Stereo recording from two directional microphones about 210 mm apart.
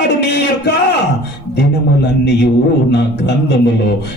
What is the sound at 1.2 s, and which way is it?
A man's voice, 55° left (ahead or behind).